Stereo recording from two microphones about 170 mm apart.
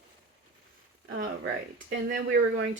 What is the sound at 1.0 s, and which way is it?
Speech, 90° right.